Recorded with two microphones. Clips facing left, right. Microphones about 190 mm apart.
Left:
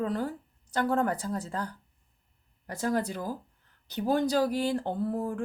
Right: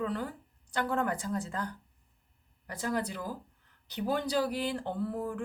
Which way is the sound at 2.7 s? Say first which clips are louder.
Left 4 dB; 40° left (ahead or behind).